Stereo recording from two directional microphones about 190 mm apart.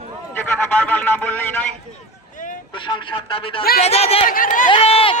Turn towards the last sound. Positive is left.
turn(degrees=30)  # may be behind; listen again after turning